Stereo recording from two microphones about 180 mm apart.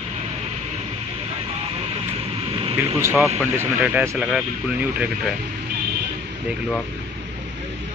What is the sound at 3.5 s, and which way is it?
Speech, 10° right (ahead or behind).